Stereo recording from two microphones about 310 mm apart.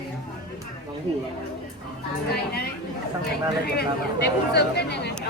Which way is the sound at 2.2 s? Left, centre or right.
Left.